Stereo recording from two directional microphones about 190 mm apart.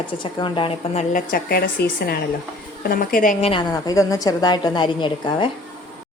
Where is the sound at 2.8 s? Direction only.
45° left (ahead or behind); by 3.6 s 30° left (ahead or behind).